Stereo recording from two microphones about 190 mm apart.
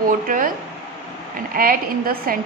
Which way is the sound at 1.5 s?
50° right (ahead or behind).